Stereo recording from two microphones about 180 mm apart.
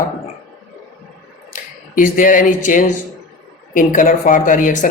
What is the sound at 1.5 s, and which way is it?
Speech, 50° left (ahead or behind).